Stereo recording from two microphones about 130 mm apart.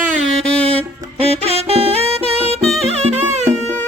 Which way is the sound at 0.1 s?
60° right (ahead or behind).